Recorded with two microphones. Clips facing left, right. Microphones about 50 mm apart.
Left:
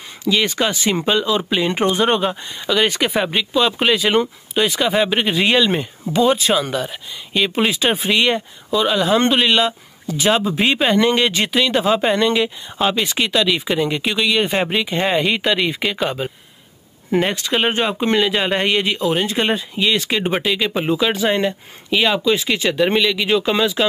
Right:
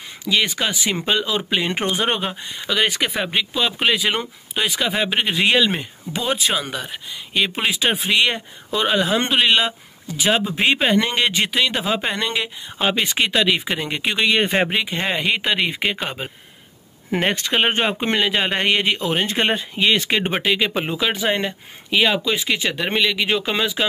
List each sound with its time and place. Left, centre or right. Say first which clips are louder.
0.3 s speech: left 2 dB; centre
13.0 s speech: left 1 dB; centre
14.1 s speech: right 2 dB; right
14.5 s speech: even; centre
14.9 s speech: left 4 dB; centre
15.3 s speech: left 2 dB; centre
17.5 s speech: left 1 dB; centre